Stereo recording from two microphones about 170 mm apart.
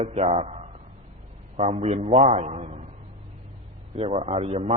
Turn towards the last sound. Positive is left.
turn(degrees=-40)  # may be behind; listen again after turning